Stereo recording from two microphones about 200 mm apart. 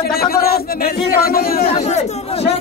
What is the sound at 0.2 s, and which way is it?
Speech, 50° left (ahead or behind).